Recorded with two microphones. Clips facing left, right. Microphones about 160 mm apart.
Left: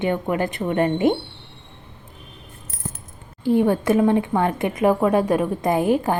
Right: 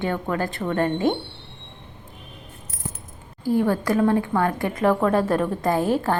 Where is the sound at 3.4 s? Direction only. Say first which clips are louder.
Left 3 dB; 25° left (ahead or behind).